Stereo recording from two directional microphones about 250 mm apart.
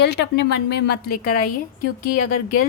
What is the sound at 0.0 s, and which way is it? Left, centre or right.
Speech, left.